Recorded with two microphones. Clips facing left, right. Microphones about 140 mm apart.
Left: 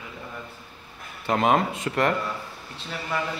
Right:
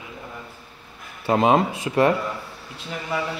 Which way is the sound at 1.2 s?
20° right (ahead or behind).